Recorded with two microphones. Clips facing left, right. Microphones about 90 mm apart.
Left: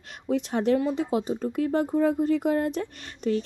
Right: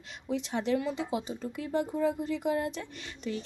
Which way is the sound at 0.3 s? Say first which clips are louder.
Left 6 dB; 50° left (ahead or behind).